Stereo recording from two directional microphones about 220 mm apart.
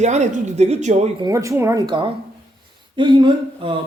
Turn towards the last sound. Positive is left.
turn(degrees=-25)  # may be behind; listen again after turning